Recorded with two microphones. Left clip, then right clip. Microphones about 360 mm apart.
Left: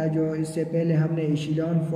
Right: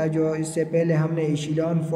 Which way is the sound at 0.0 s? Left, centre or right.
Centre.